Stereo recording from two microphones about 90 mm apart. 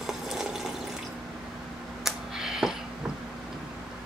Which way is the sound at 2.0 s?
5° right (ahead or behind).